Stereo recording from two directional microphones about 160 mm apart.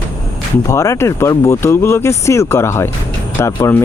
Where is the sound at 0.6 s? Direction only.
20° left (ahead or behind).